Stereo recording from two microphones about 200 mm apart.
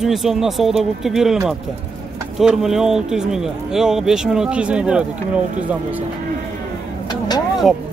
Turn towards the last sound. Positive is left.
turn(degrees=20)  # may be behind; listen again after turning